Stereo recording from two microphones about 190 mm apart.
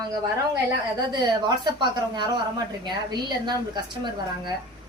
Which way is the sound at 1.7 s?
25° right (ahead or behind).